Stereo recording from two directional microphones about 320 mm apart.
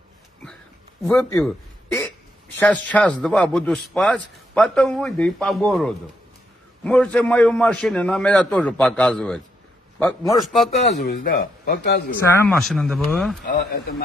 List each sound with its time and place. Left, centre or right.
1.0 s a man's voice: centre
11.1 s speech: left
12.4 s a man's voice: centre
13.5 s speech: left